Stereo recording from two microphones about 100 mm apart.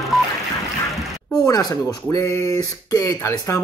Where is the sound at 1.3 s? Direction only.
45° left (ahead or behind).